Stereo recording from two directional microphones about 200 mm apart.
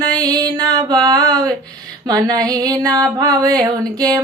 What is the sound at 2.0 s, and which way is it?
Singing, 20° right (ahead or behind).